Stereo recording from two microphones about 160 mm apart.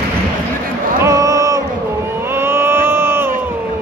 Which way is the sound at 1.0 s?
20° right (ahead or behind).